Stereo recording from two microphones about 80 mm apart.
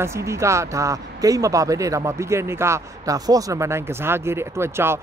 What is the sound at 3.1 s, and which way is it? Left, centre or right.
Speech, right.